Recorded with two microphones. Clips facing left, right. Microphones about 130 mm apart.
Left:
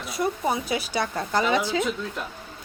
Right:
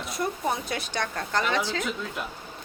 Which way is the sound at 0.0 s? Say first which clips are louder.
Left 3 dB; centre (ahead or behind).